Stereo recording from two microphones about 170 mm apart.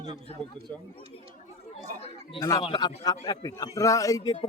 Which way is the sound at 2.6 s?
25° left (ahead or behind).